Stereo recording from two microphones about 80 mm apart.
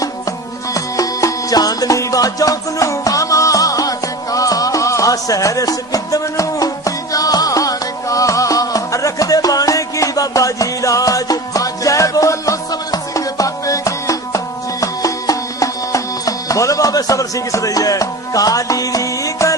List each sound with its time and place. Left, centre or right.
0.0 s music: left